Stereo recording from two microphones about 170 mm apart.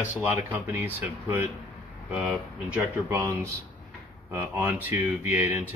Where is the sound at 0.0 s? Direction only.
10° right (ahead or behind).